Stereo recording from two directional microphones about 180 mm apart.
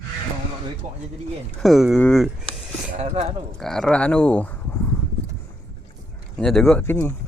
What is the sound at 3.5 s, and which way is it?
Speech, centre (ahead or behind).